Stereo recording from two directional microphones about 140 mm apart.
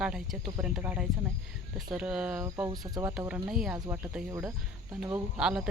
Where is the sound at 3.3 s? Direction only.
5° right (ahead or behind).